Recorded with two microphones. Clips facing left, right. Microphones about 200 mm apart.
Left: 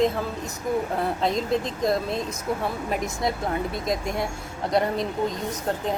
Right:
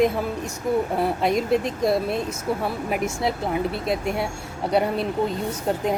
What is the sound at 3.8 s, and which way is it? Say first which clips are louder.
A woman's voice: right 2 dB; 5° right (ahead or behind).